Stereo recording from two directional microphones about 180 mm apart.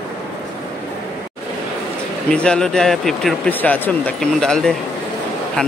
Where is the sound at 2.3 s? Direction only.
5° left (ahead or behind).